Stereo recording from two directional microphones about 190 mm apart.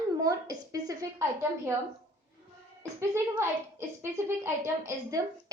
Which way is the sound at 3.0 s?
15° right (ahead or behind).